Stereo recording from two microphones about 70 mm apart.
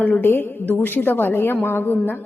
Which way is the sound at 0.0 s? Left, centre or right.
Left.